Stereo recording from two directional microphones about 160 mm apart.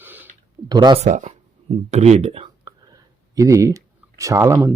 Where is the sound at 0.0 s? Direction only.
10° right (ahead or behind).